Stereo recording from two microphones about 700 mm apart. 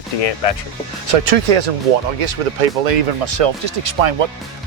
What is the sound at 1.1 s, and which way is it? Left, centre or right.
Speech, right.